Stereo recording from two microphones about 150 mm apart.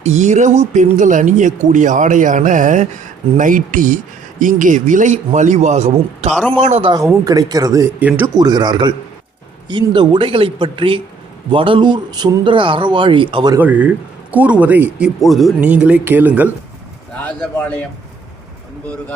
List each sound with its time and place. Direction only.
0.0 s a man's voice: 50° right (ahead or behind)
6.8 s speech: 25° right (ahead or behind)
8.4 s a man's voice: 30° right (ahead or behind)
13.6 s speech: 10° right (ahead or behind)
17.6 s a man's voice: 10° left (ahead or behind)